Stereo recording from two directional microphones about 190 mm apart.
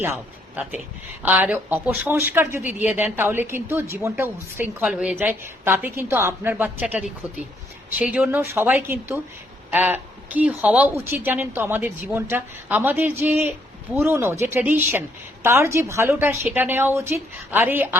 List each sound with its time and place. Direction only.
0.0 s a man's voice: 10° right (ahead or behind)